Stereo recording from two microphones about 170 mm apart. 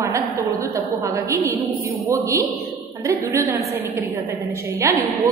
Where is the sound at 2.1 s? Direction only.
15° right (ahead or behind).